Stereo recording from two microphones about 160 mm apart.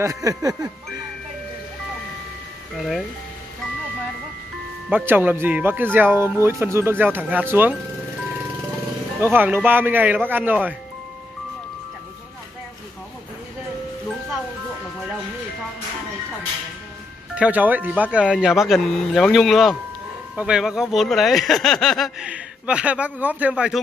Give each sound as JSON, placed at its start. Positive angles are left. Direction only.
{"t": 0.0, "sound": "music", "side_deg": -20}
{"t": 2.8, "sound": "speech", "side_deg": 0}
{"t": 4.8, "sound": "speech", "side_deg": -10}
{"t": 9.2, "sound": "speech", "side_deg": -10}
{"t": 17.4, "sound": "speech", "side_deg": -10}